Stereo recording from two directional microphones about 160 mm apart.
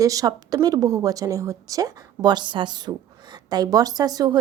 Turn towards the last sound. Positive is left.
turn(degrees=-25)  # may be behind; listen again after turning